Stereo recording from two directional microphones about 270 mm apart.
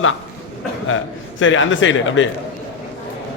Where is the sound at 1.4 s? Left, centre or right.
Left.